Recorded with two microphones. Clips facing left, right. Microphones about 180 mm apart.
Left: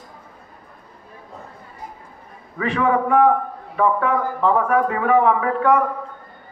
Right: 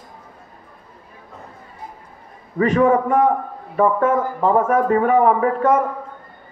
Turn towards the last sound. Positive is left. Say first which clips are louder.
# right 1 dB
turn(degrees=-45)  # may be behind; listen again after turning